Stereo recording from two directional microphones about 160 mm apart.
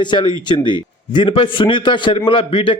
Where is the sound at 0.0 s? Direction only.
30° left (ahead or behind).